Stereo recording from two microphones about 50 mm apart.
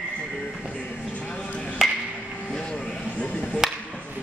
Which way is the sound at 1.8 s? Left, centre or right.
Centre.